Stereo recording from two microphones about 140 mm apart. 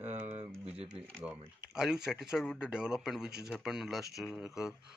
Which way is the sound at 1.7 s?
5° right (ahead or behind).